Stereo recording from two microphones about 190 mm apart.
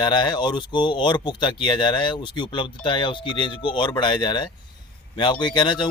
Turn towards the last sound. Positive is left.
turn(degrees=25)  # may be behind; listen again after turning